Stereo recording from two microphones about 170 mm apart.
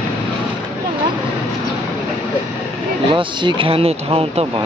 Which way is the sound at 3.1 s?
30° right (ahead or behind).